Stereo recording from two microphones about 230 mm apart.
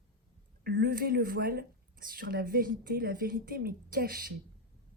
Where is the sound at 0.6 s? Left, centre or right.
Right.